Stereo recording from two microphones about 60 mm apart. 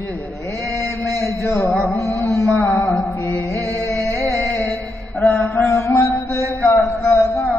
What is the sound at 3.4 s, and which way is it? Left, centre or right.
Music, left.